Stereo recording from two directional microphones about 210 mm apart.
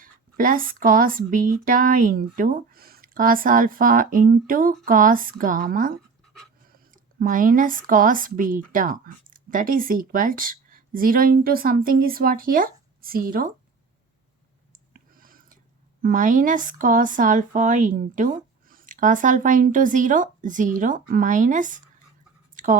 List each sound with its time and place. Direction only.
0.0 s a woman's voice: 40° right (ahead or behind)
14.7 s clicking: 40° right (ahead or behind)
16.0 s speech: 40° right (ahead or behind)
22.5 s a sound: 40° right (ahead or behind)